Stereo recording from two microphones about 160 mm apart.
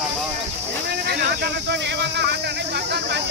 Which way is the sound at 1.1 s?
90° right.